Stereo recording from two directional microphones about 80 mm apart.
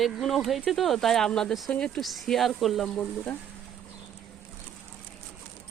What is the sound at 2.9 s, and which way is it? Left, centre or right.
Speech, left.